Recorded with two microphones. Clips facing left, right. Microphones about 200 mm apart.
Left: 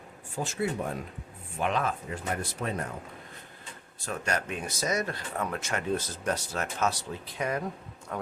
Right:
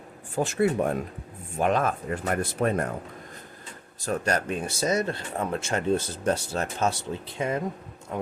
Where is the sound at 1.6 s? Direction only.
45° right (ahead or behind).